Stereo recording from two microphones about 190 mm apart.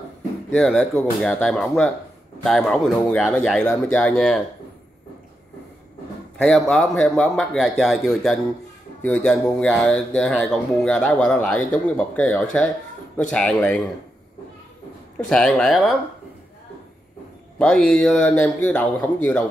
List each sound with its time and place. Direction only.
0.6 s speech: 5° left (ahead or behind)
6.3 s a man's voice: centre (ahead or behind)
15.2 s speech: 5° left (ahead or behind)
17.6 s speech: 5° left (ahead or behind)